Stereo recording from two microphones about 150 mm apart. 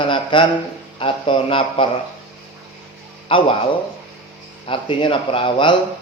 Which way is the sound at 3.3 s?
35° left (ahead or behind).